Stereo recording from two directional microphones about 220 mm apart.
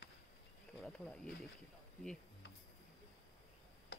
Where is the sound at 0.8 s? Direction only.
5° left (ahead or behind).